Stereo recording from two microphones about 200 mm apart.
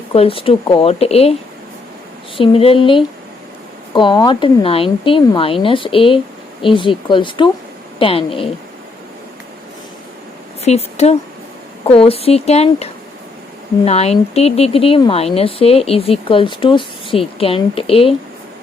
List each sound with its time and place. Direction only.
0.1 s speech: 25° left (ahead or behind)
2.4 s speech: 30° left (ahead or behind)
10.6 s speech: 30° left (ahead or behind)